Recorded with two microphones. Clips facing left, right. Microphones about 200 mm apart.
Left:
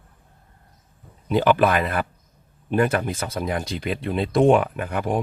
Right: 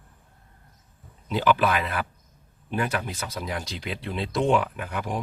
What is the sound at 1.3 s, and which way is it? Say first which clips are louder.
Speech: left 5 dB; 50° left (ahead or behind).